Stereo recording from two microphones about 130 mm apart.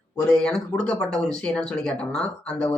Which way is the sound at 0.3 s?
5° left (ahead or behind).